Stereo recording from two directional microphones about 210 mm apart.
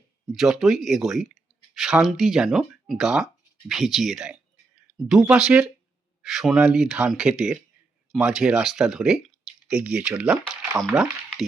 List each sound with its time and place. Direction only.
0.3 s speech: centre (ahead or behind)
10.9 s speech: centre (ahead or behind)